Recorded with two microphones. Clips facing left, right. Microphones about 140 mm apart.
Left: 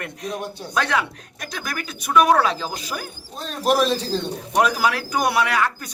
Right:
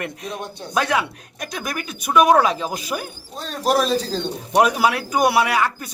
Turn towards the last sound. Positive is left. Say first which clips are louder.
# right 2 dB
turn(degrees=-10)  # may be behind; listen again after turning